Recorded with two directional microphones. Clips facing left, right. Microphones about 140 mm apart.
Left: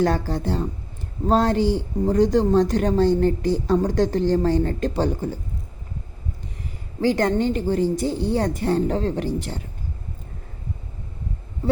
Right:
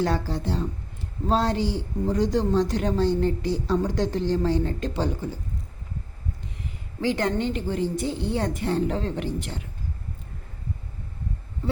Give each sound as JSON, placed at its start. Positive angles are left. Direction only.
{"t": 0.0, "sound": "a woman's voice", "side_deg": 50}
{"t": 7.0, "sound": "a woman's voice", "side_deg": 40}